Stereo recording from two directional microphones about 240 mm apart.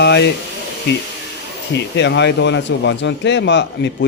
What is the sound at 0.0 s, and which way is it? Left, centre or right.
Speech, left.